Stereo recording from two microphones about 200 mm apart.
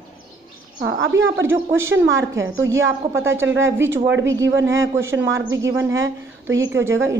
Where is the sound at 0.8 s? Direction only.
65° right (ahead or behind).